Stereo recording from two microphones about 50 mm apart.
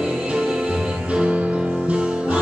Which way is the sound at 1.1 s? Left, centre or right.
Right.